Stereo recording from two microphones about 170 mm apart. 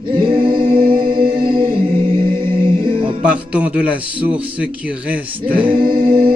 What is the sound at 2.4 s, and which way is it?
Music, 30° right (ahead or behind).